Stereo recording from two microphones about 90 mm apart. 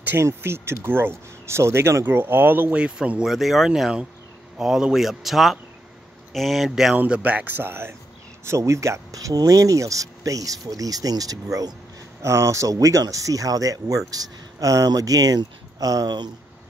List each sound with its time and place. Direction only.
0.2 s speech: 30° right (ahead or behind); by 7.0 s 5° right (ahead or behind)
7.0 s speech: 15° right (ahead or behind); by 16.3 s 45° right (ahead or behind)